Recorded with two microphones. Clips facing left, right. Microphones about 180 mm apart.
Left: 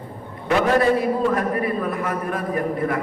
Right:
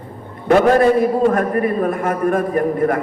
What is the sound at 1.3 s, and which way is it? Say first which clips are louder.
A man's voice: right 5 dB; 50° right (ahead or behind).